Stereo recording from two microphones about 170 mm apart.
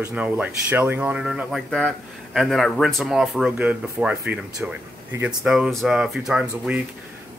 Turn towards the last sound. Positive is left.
turn(degrees=-5)  # may be behind; listen again after turning